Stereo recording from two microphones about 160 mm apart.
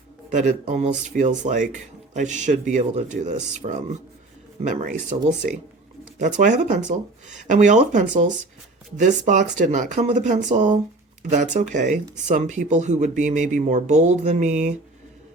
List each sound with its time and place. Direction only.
0.3 s speech: 50° right (ahead or behind)